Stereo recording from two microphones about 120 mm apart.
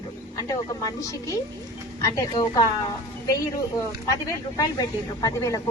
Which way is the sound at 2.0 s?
25° left (ahead or behind).